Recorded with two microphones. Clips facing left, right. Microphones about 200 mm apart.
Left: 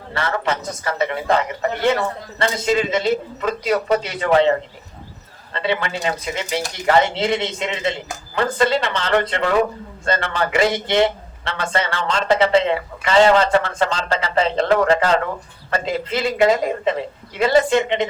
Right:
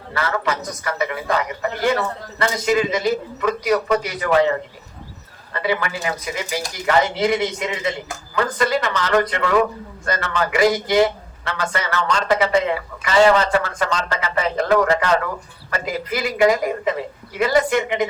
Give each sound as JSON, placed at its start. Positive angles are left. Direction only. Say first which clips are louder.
{"t": 0.1, "sound": "speech", "louder": "even", "side_deg": 25}
{"t": 5.5, "sound": "speech", "louder": "even", "side_deg": 25}